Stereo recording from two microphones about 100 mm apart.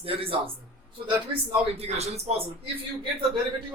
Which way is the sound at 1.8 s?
90° right.